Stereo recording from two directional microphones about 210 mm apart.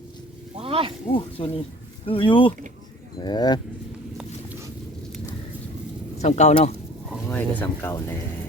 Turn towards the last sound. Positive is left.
turn(degrees=10)  # may be behind; listen again after turning